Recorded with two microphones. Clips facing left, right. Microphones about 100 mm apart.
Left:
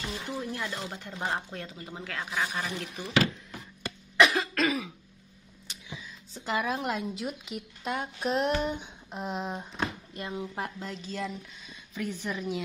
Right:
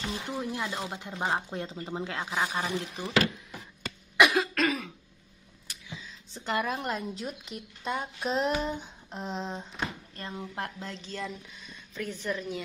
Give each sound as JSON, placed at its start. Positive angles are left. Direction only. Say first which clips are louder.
{"t": 0.0, "sound": "speech", "louder": "right 1 dB", "side_deg": -20}
{"t": 4.2, "sound": "cough", "louder": "even", "side_deg": -5}
{"t": 5.7, "sound": "a sound", "louder": "left 1 dB", "side_deg": 15}
{"t": 6.3, "sound": "a woman's voice", "louder": "even", "side_deg": 0}
{"t": 10.5, "sound": "a woman's voice", "louder": "left 1 dB", "side_deg": 0}